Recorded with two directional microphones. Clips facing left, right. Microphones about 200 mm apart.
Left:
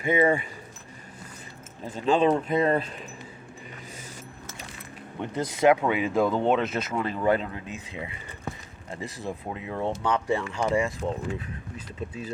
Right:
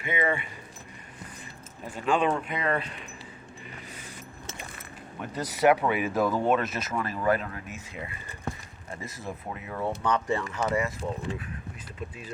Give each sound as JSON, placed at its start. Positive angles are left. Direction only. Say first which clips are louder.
{"t": 0.0, "sound": "speech", "louder": "left 6 dB", "side_deg": 40}
{"t": 2.0, "sound": "speech", "louder": "left 4 dB", "side_deg": 35}
{"t": 5.2, "sound": "speech", "louder": "left 2 dB", "side_deg": 20}